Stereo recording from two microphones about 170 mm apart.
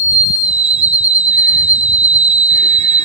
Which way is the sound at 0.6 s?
40° right (ahead or behind).